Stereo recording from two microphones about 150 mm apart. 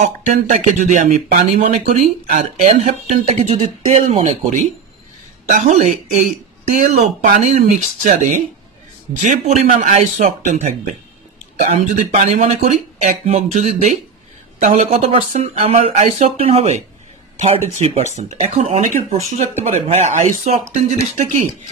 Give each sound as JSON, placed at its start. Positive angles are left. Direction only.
{"t": 0.0, "sound": "speech", "side_deg": -55}
{"t": 5.5, "sound": "speech", "side_deg": -55}